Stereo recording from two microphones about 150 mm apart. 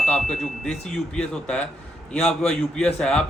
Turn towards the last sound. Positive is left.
turn(degrees=5)  # may be behind; listen again after turning